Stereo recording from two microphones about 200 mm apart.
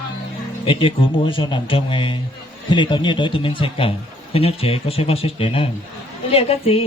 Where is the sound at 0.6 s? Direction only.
25° left (ahead or behind).